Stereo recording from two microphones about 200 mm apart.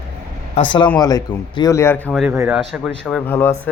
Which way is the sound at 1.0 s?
20° left (ahead or behind).